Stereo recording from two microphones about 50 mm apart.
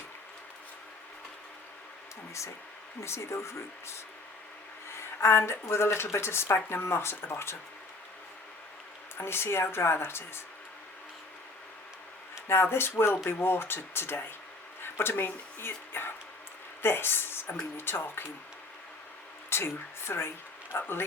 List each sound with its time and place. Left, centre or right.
3.0 s speech: left
9.1 s speech: left
12.5 s speech: left
19.5 s speech: left
20.7 s speech: left